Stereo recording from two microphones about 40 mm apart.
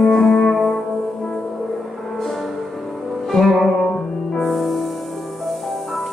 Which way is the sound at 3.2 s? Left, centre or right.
Centre.